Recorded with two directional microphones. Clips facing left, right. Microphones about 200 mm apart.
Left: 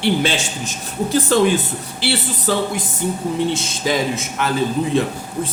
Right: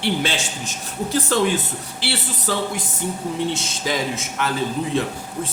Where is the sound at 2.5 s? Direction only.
20° left (ahead or behind).